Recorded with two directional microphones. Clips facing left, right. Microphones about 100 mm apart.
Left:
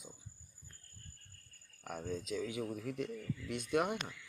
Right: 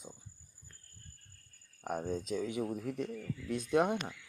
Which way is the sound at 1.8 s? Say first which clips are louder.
Right 5 dB; 40° right (ahead or behind).